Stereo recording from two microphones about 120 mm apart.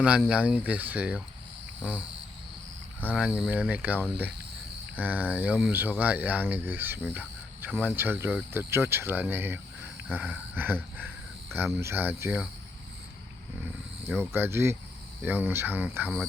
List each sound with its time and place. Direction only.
0.3 s speech: 10° right (ahead or behind)
3.1 s speech: 10° right (ahead or behind)
14.1 s speech: 20° right (ahead or behind)